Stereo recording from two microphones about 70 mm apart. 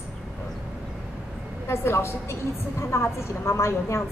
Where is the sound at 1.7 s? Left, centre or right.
Left.